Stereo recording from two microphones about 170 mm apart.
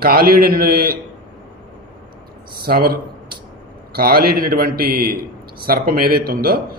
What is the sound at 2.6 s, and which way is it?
A man's voice, 60° right (ahead or behind).